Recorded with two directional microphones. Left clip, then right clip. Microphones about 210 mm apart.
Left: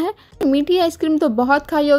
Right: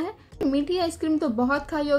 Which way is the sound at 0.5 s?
40° left (ahead or behind).